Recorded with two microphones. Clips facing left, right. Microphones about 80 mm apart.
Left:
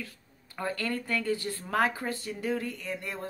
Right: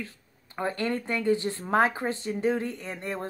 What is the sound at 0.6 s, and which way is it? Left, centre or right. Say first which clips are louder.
Speech: right 4 dB; right.